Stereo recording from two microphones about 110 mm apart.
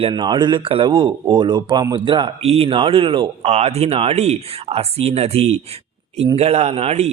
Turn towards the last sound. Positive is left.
turn(degrees=-70)  # may be behind; listen again after turning